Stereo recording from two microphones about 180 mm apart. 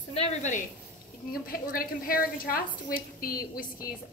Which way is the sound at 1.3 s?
55° left (ahead or behind).